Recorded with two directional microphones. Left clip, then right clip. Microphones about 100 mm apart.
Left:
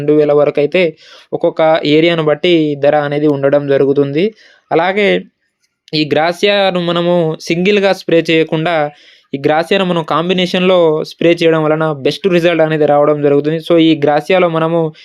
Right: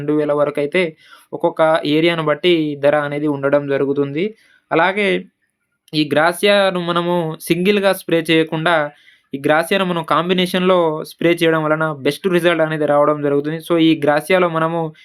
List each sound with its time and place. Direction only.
0.0 s speech: 30° left (ahead or behind)